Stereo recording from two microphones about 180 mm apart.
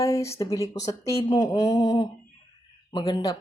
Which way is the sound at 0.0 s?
15° left (ahead or behind).